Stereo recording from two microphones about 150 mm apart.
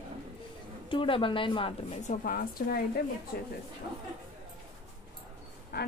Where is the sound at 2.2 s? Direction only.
75° left (ahead or behind).